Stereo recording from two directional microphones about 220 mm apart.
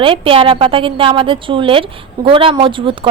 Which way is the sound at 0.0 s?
25° right (ahead or behind).